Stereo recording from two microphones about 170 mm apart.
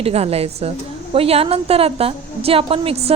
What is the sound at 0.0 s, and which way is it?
A woman's voice, 35° right (ahead or behind).